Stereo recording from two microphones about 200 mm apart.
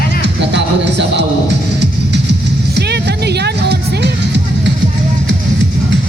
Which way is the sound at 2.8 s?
55° right (ahead or behind).